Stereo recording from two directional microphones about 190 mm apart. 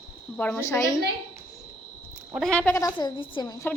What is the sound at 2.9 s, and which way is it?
Speech, 25° left (ahead or behind).